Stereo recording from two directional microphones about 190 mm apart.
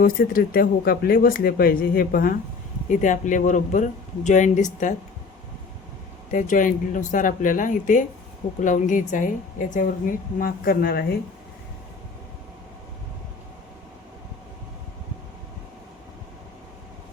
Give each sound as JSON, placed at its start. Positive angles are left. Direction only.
{"t": 0.0, "sound": "speech", "side_deg": 50}
{"t": 6.3, "sound": "speech", "side_deg": 45}